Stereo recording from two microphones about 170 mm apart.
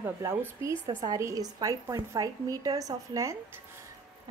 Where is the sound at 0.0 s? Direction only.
15° right (ahead or behind).